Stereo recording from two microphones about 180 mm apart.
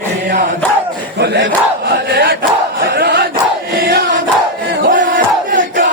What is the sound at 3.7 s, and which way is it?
Choir, 60° right (ahead or behind).